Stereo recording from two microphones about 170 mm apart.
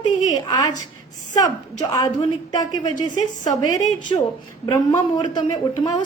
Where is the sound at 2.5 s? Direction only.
20° left (ahead or behind).